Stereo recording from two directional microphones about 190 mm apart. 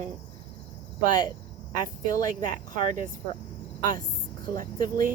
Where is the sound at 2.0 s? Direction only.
20° left (ahead or behind).